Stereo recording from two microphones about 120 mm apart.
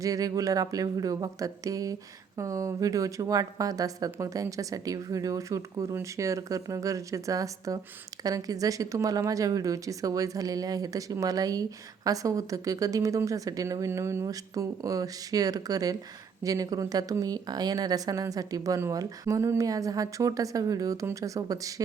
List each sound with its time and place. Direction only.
0.0 s speech: 30° right (ahead or behind)